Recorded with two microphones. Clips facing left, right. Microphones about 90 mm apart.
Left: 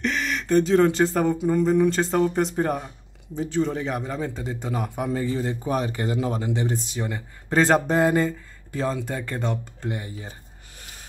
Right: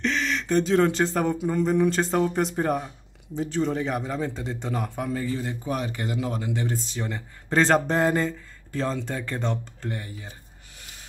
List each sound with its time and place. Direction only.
0.0 s speech: 10° left (ahead or behind); by 6.5 s 30° left (ahead or behind)
6.5 s speech: 20° left (ahead or behind)
9.8 s speech: 15° left (ahead or behind)